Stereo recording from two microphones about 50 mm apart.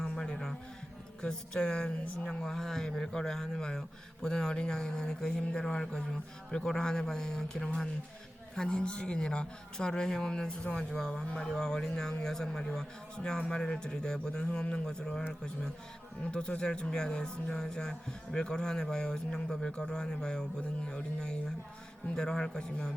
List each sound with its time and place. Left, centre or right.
0.0 s a sound: centre
1.2 s speech: centre
16.2 s speech: left